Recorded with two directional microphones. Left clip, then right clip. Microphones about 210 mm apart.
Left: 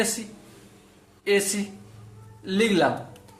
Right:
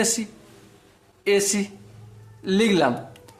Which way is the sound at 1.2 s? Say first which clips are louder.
Right 2 dB; 35° right (ahead or behind).